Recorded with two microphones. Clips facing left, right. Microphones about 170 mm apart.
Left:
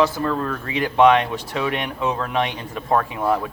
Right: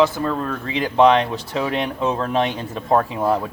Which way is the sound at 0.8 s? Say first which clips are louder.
Even; 30° right (ahead or behind).